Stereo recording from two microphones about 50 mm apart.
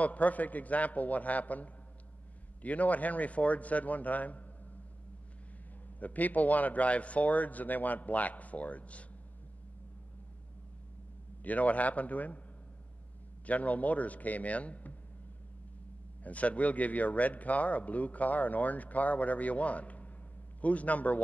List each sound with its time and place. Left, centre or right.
0.0 s speech: left
5.9 s speech: left
11.4 s speech: left
13.5 s speech: left
16.3 s speech: left